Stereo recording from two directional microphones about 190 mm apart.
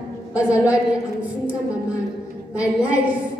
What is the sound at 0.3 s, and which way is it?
Speech, 5° right (ahead or behind).